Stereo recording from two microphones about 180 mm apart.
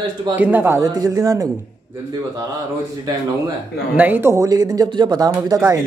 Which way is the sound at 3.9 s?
10° right (ahead or behind).